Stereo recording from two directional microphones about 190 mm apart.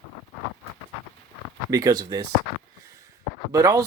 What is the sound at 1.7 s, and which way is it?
Speech, 20° right (ahead or behind).